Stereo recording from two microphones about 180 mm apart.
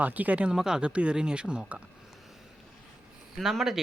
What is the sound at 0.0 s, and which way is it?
Speech, 10° right (ahead or behind).